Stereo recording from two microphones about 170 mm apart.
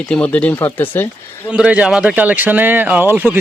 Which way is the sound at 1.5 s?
5° right (ahead or behind).